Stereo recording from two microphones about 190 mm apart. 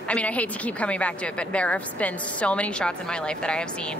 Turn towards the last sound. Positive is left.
turn(degrees=5)  # may be behind; listen again after turning